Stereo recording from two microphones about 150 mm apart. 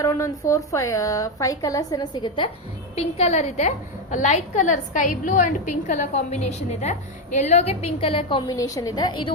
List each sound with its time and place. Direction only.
0.0 s a woman's voice: 20° left (ahead or behind)
2.9 s a woman's voice: 45° left (ahead or behind)